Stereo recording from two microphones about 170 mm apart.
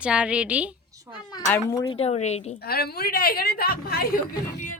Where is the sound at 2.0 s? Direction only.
40° left (ahead or behind).